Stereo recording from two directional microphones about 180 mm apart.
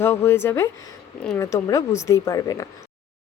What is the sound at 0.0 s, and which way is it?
Speech, 15° left (ahead or behind).